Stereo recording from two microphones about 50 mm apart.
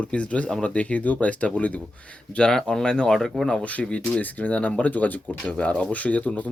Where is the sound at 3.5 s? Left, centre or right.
Left.